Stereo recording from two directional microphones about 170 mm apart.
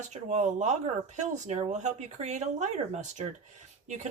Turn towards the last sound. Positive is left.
turn(degrees=-45)  # may be behind; listen again after turning